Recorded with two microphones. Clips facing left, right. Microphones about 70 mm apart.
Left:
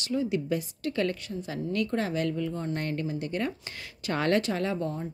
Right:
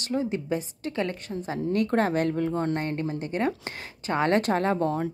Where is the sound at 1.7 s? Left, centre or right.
Right.